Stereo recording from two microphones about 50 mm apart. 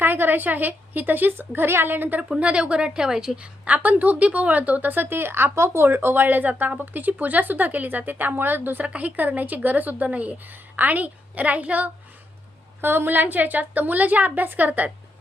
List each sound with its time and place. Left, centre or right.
0.0 s a woman's voice: right
2.4 s a woman's voice: right
8.8 s a woman's voice: right
12.8 s a woman's voice: right